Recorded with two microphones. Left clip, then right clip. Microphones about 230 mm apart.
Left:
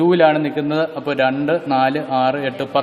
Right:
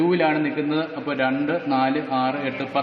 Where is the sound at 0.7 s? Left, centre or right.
Left.